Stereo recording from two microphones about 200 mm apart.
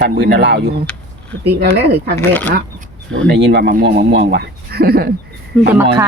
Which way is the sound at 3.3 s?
60° right (ahead or behind).